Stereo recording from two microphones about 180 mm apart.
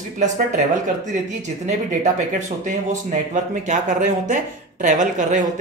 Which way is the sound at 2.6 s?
45° right (ahead or behind).